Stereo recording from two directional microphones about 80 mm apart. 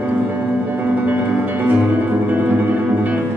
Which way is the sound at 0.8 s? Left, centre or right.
Right.